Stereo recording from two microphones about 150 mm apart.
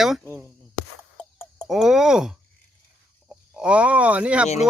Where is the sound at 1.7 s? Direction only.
5° right (ahead or behind).